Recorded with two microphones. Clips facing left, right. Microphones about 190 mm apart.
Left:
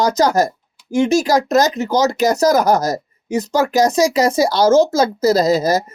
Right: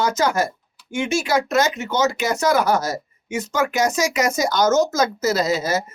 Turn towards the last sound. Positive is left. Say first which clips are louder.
# left 6 dB
turn(degrees=40)  # may be behind; listen again after turning